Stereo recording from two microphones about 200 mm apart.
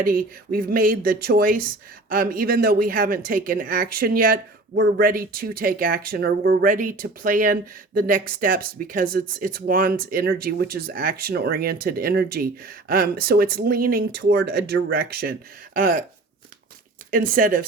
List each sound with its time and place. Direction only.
0.0 s speech: 45° right (ahead or behind)
17.1 s speech: 45° right (ahead or behind)